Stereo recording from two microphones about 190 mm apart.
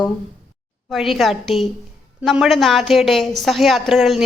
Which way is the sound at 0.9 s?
Centre (ahead or behind).